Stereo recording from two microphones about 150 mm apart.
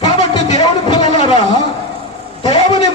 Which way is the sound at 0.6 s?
30° left (ahead or behind).